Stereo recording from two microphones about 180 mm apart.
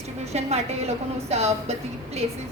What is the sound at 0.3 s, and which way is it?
A woman's voice, 35° right (ahead or behind).